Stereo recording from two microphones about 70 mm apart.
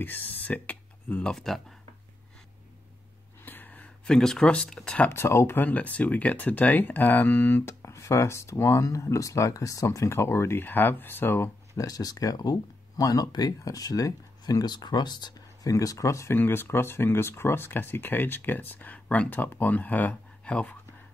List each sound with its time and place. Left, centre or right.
0.0 s speech: left
1.3 s speech: centre
3.4 s a sound: left; by 4.9 s centre
5.1 s speech: left
5.6 s speech: left
7.8 s speech: left
11.8 s speech: left
16.3 s speech: left